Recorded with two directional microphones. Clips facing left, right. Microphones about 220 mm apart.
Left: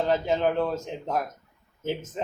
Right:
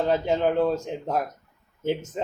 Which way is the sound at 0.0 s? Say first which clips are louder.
Right 1 dB; 15° right (ahead or behind).